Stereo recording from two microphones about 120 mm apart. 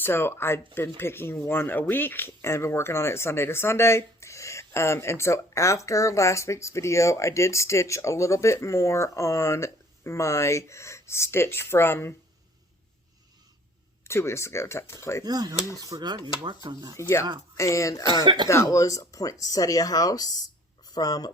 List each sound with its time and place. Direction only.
0.0 s speech: 20° left (ahead or behind)
14.1 s speech: 20° left (ahead or behind)
15.2 s speech: 35° right (ahead or behind)
16.9 s speech: 25° left (ahead or behind)